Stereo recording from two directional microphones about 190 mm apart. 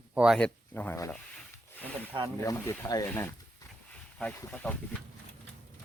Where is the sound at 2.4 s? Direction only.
15° left (ahead or behind).